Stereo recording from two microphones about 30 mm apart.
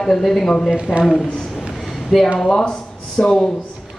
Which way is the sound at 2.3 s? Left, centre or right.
Centre.